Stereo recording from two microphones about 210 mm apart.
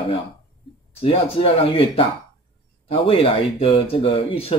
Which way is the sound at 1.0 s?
25° left (ahead or behind).